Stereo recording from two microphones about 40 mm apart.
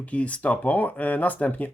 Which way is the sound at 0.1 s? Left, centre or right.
Left.